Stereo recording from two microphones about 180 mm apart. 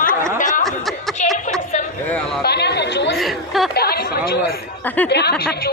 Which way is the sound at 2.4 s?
65° left (ahead or behind).